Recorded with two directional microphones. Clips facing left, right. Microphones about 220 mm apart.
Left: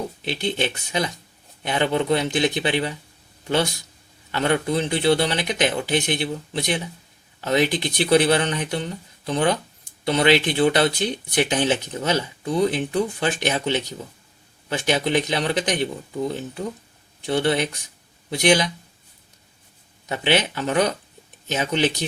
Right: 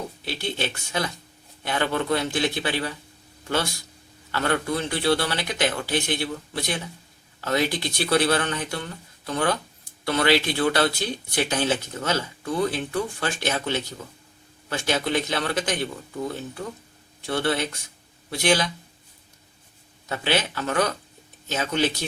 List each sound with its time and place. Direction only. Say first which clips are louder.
0.3 s speech: left 4 dB; 20° left (ahead or behind)
20.1 s speech: left 4 dB; 20° left (ahead or behind)